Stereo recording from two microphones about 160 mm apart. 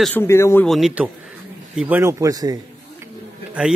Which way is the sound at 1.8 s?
10° right (ahead or behind).